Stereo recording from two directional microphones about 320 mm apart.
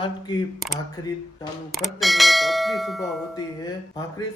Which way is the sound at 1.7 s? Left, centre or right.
Centre.